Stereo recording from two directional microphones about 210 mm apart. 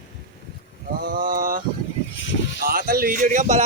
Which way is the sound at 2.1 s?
60° left (ahead or behind).